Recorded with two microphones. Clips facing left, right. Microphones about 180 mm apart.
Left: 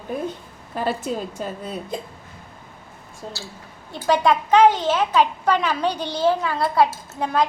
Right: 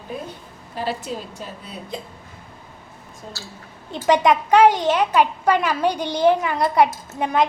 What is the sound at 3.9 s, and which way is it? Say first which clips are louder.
A woman's voice: right 2 dB; 20° right (ahead or behind).